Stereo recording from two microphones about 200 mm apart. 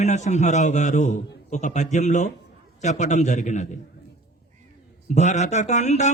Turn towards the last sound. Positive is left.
turn(degrees=35)  # may be behind; listen again after turning